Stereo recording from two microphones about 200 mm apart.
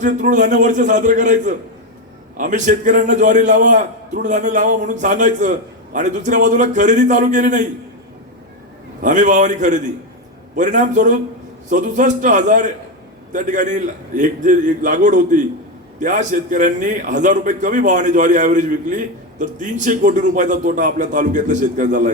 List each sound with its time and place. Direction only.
0.0 s a man's voice: 40° right (ahead or behind)
9.0 s a man's voice: 40° right (ahead or behind)